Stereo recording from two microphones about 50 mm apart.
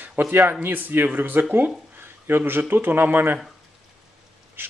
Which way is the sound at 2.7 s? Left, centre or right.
Right.